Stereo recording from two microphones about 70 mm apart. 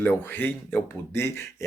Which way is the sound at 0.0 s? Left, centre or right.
Left.